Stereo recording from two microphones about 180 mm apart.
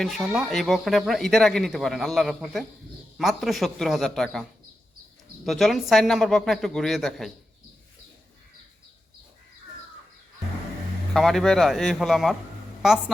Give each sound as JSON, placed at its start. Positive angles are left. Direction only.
{"t": 0.0, "sound": "speech", "side_deg": 0}
{"t": 5.5, "sound": "speech", "side_deg": 0}
{"t": 11.1, "sound": "speech", "side_deg": 0}